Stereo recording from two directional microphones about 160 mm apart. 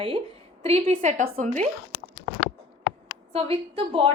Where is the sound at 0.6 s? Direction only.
45° right (ahead or behind).